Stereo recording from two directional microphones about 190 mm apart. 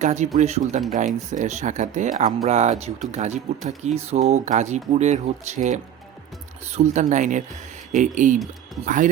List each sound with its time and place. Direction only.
0.0 s speech: 35° right (ahead or behind)